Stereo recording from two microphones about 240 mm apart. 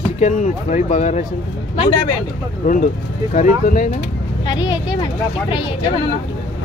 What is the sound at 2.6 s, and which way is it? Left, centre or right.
Speech, left.